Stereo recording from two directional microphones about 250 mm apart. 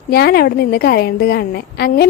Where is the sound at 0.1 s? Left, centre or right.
Left.